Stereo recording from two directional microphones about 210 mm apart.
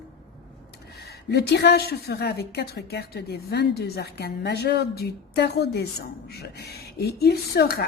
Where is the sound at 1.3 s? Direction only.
50° left (ahead or behind).